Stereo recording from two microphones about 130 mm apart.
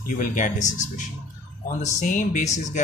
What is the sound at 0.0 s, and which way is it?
Speech, 85° left.